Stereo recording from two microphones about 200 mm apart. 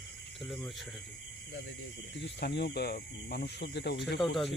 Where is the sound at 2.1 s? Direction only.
60° left (ahead or behind).